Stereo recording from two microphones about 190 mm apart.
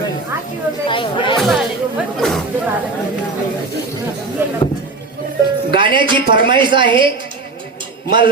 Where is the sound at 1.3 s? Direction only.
Centre (ahead or behind).